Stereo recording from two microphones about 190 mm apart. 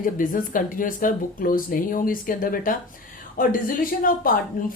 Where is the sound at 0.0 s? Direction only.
45° left (ahead or behind).